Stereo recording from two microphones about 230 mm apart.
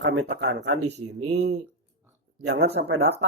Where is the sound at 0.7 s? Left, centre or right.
Right.